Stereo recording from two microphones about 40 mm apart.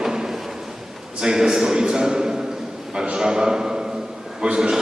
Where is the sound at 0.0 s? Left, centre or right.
Centre.